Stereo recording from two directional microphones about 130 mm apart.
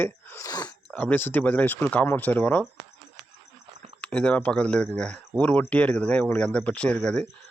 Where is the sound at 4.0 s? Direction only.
10° left (ahead or behind).